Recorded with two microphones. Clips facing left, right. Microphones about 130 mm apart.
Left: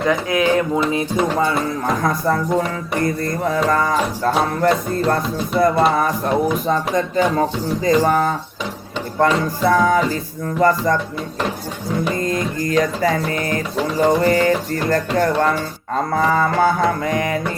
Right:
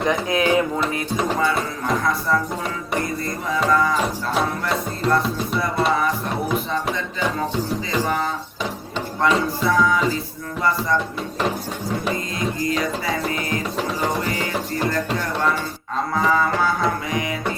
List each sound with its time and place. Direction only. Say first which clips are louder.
0.1 s speech: left 3 dB; 25° right (ahead or behind)
2.0 s music: left 1 dB; 45° left (ahead or behind)
4.6 s music: left 6 dB; 35° left (ahead or behind)
5.5 s music: left 7 dB; 45° left (ahead or behind)
12.3 s music: left 4 dB; 45° left (ahead or behind)